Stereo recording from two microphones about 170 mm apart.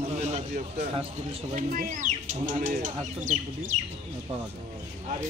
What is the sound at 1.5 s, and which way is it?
Speech, 45° right (ahead or behind).